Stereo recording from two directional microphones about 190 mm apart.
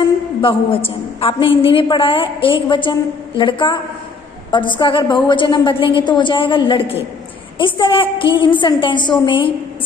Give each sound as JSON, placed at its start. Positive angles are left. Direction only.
{"t": 0.4, "sound": "a woman's voice", "side_deg": 30}